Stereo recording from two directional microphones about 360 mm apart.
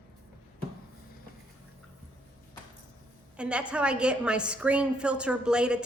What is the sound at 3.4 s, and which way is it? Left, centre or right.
A woman's voice, centre.